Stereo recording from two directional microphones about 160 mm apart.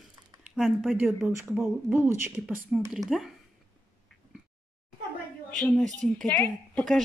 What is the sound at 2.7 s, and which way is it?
Speech, centre (ahead or behind).